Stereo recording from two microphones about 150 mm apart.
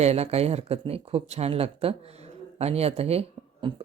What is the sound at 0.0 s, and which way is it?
Speech, 45° right (ahead or behind).